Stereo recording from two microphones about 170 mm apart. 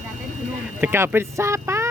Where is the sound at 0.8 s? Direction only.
15° right (ahead or behind).